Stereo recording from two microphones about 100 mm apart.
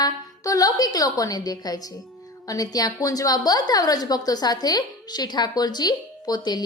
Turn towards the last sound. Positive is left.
turn(degrees=45)  # may be behind; listen again after turning